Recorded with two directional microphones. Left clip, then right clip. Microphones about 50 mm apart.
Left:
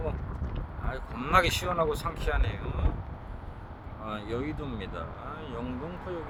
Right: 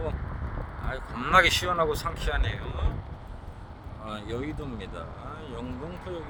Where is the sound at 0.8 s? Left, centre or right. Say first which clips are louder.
Right 3 dB; left.